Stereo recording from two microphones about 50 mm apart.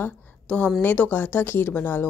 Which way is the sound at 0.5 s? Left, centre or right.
Centre.